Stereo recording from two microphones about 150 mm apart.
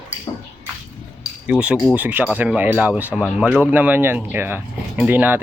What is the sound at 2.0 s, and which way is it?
Speech, 10° right (ahead or behind).